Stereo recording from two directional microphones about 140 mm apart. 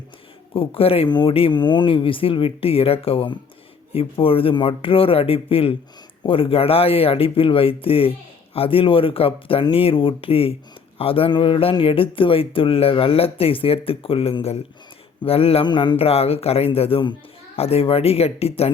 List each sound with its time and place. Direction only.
0.5 s speech: 40° left (ahead or behind)